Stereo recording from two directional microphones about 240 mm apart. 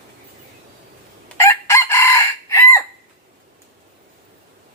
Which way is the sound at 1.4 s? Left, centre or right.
Centre.